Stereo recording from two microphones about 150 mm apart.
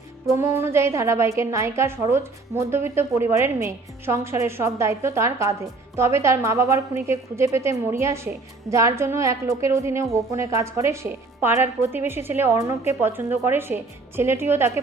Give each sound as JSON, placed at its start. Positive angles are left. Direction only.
{"t": 0.3, "sound": "a woman's voice", "side_deg": -20}